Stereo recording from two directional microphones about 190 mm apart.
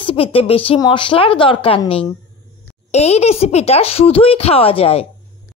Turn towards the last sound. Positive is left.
turn(degrees=30)  # may be behind; listen again after turning